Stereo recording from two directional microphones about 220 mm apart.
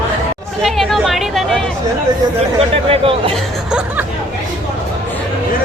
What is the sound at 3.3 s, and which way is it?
Chuckle, 5° right (ahead or behind).